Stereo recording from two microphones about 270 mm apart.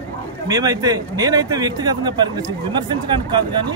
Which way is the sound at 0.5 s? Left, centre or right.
Centre.